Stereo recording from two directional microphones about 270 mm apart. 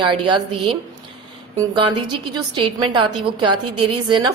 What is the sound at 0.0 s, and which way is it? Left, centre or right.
Speech, centre.